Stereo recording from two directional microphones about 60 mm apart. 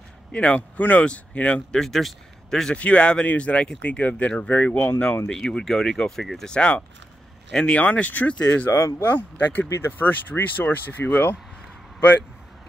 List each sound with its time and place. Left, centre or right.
0.3 s speech: centre
1.8 s speech: centre
2.7 s speech: left
5.5 s speech: centre
7.8 s speech: left
8.7 s speech: left
9.1 s speech: left
9.7 s speech: left
10.0 s speech: left